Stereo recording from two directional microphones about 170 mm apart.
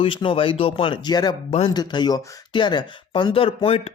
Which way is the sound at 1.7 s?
25° left (ahead or behind).